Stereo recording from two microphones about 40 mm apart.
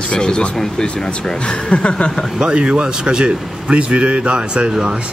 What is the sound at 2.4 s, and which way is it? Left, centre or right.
Speech, right.